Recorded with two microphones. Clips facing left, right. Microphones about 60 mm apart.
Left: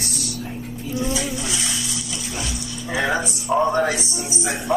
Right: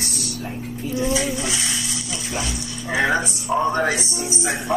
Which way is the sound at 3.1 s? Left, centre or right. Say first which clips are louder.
Even; centre.